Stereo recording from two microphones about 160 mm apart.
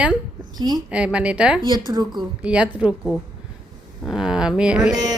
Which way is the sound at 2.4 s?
5° right (ahead or behind).